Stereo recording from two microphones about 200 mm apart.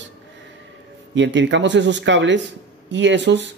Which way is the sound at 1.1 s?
65° right (ahead or behind).